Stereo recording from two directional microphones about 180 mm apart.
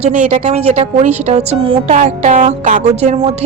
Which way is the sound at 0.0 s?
35° right (ahead or behind).